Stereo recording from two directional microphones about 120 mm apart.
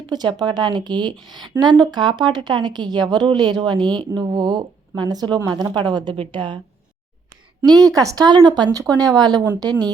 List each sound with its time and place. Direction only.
0.1 s a woman's voice: 35° right (ahead or behind)
7.8 s a woman's voice: 30° right (ahead or behind)